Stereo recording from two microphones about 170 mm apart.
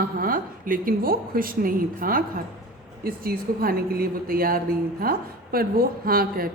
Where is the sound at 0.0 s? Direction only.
55° right (ahead or behind).